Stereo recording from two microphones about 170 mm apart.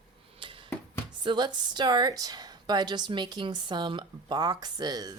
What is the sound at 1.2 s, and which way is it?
A woman's voice, 25° right (ahead or behind).